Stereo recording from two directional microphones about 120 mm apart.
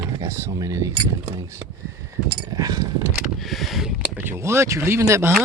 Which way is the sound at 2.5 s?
30° right (ahead or behind).